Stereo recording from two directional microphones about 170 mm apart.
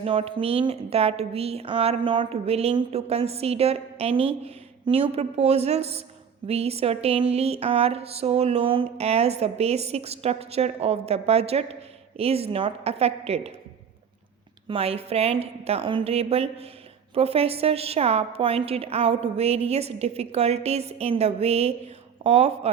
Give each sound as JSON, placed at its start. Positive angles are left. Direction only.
{"t": 0.0, "sound": "speech", "side_deg": -35}
{"t": 14.7, "sound": "speech", "side_deg": -35}